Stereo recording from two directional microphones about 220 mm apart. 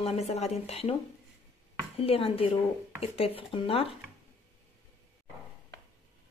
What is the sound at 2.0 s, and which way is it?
Speech, 25° left (ahead or behind).